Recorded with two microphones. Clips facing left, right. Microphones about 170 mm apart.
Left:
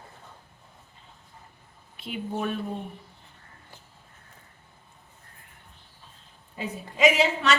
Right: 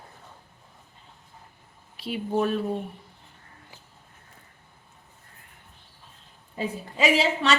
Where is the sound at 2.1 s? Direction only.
35° right (ahead or behind).